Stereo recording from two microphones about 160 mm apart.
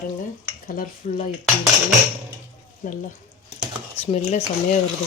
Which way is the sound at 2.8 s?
55° left (ahead or behind).